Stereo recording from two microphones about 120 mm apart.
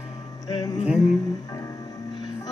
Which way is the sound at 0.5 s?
35° left (ahead or behind).